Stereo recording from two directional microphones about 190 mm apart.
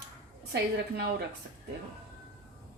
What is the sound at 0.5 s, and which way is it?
Speech, 55° right (ahead or behind).